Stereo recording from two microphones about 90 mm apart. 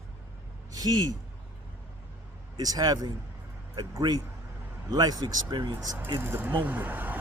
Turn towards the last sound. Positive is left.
turn(degrees=-20)  # may be behind; listen again after turning